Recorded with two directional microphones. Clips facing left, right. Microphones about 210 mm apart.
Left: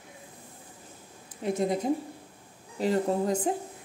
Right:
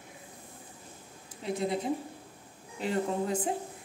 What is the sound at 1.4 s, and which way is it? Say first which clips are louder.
Speech: left 4 dB; 45° left (ahead or behind).